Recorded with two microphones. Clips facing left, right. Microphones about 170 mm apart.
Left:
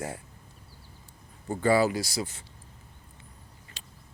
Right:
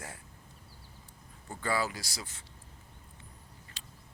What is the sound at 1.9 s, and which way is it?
Speech, 25° left (ahead or behind).